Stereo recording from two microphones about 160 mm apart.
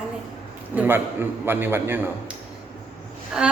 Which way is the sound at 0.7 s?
10° right (ahead or behind).